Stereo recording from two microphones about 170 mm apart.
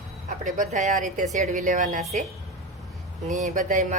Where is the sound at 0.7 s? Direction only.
45° right (ahead or behind).